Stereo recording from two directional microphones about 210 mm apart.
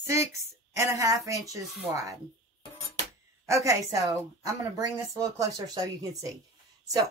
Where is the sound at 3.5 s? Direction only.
15° right (ahead or behind).